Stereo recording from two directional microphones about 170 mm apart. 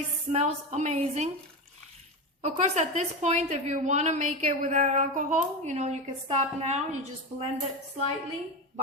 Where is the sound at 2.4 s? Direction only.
40° right (ahead or behind).